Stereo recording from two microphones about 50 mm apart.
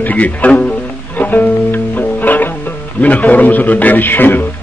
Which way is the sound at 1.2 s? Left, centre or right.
Left.